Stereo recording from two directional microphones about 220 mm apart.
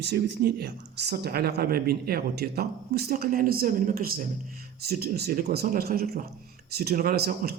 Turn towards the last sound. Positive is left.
turn(degrees=-45)  # may be behind; listen again after turning